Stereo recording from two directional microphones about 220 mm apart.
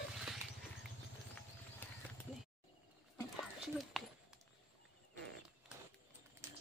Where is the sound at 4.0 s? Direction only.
Centre (ahead or behind).